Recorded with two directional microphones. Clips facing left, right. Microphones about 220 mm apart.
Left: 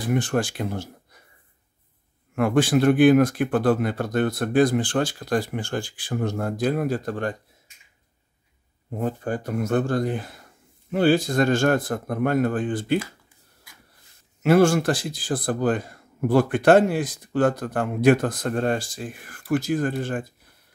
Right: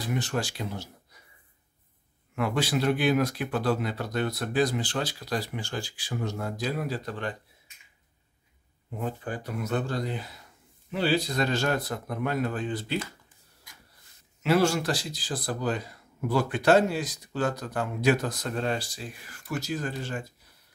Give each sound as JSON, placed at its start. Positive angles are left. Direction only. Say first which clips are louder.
{"t": 0.0, "sound": "speech", "louder": "left 7 dB", "side_deg": 50}
{"t": 2.3, "sound": "speech", "louder": "left 8 dB", "side_deg": 50}
{"t": 8.9, "sound": "speech", "louder": "left 7 dB", "side_deg": 45}
{"t": 14.4, "sound": "speech", "louder": "left 6 dB", "side_deg": 50}